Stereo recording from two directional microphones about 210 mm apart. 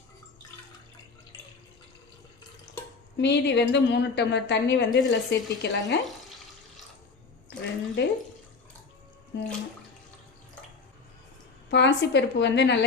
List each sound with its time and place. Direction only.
3.2 s a woman's voice: 55° left (ahead or behind)
8.0 s a woman's voice: 55° left (ahead or behind)
9.3 s speech: 55° left (ahead or behind)
11.7 s a woman's voice: 55° left (ahead or behind)